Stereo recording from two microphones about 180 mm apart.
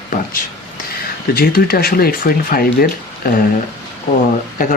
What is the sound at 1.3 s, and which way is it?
Speech, 55° left (ahead or behind).